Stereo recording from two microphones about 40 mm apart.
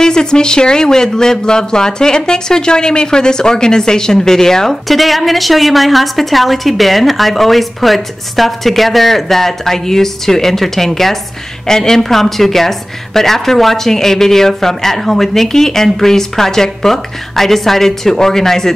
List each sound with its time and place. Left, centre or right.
0.0 s a woman's voice: centre
4.8 s a woman's voice: centre